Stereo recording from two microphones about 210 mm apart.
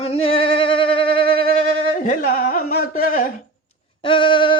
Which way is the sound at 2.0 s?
40° left (ahead or behind).